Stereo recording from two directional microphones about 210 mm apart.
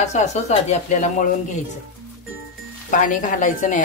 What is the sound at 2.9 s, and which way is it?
Speech, 40° left (ahead or behind).